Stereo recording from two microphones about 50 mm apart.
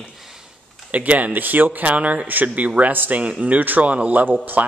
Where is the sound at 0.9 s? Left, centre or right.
Right.